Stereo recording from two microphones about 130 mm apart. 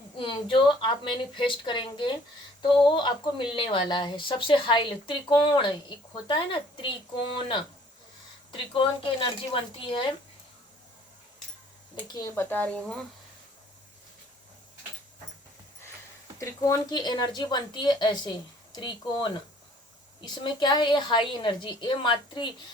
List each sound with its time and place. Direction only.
0.2 s a woman's voice: 40° left (ahead or behind)
8.7 s speech: 40° left (ahead or behind)
12.0 s a woman's voice: 30° left (ahead or behind)
12.3 s speech: 15° left (ahead or behind)
16.4 s a woman's voice: 25° left (ahead or behind)